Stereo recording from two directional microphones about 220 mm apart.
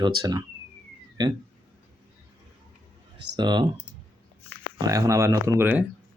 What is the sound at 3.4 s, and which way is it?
Speech, 20° right (ahead or behind).